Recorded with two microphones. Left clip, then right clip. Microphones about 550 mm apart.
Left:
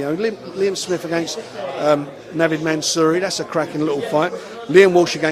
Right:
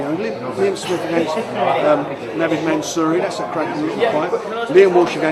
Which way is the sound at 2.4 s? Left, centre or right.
Left.